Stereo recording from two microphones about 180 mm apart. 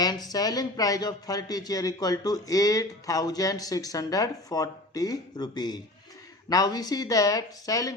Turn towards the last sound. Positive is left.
turn(degrees=20)  # may be behind; listen again after turning